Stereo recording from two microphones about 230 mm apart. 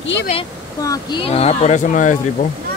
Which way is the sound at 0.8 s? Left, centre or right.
Centre.